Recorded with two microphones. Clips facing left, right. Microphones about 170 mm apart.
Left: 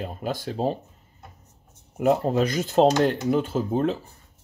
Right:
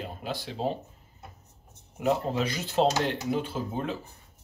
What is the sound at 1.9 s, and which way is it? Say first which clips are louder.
Speech: left 6 dB; 50° left (ahead or behind).